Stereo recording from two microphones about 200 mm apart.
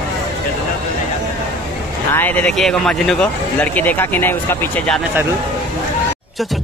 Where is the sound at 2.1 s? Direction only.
10° left (ahead or behind).